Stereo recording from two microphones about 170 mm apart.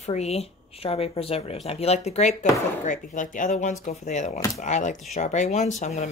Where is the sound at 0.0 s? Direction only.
40° left (ahead or behind).